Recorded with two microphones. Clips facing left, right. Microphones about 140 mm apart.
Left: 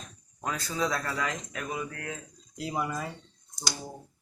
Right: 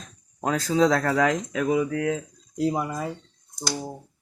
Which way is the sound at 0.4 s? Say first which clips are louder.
Right 10 dB; 90° right.